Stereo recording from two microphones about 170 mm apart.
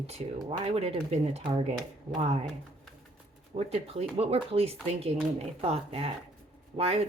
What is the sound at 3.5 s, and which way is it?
Speech, 40° right (ahead or behind).